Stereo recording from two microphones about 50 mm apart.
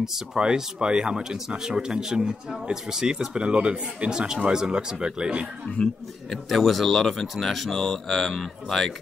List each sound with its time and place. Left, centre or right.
0.0 s speech: centre
6.3 s speech: centre